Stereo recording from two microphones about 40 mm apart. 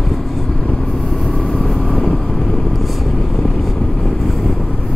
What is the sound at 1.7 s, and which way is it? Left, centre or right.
Vehicle, centre.